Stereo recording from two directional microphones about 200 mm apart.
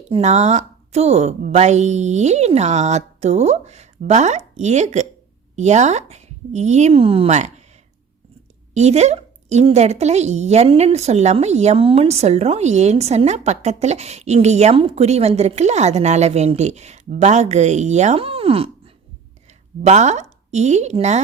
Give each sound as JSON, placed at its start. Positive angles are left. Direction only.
{"t": 0.1, "sound": "a woman's voice", "side_deg": -35}
{"t": 8.7, "sound": "a woman's voice", "side_deg": -35}
{"t": 19.8, "sound": "a woman's voice", "side_deg": -35}